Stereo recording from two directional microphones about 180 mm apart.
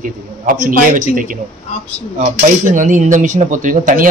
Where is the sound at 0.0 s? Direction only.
50° right (ahead or behind).